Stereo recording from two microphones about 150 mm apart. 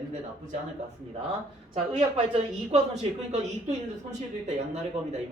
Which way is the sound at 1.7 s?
45° right (ahead or behind).